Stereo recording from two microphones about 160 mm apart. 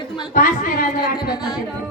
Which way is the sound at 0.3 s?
60° left (ahead or behind).